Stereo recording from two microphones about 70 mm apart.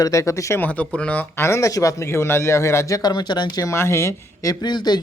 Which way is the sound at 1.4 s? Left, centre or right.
Left.